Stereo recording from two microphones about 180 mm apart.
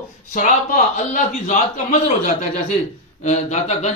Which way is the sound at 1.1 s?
45° left (ahead or behind).